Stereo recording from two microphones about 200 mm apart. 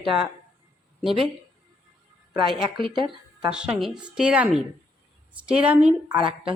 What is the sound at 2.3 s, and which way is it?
Speech, 25° right (ahead or behind).